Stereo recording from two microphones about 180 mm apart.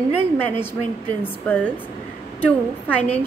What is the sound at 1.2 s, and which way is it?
Speech, 10° left (ahead or behind).